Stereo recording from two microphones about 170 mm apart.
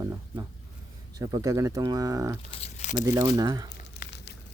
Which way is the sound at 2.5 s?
40° left (ahead or behind).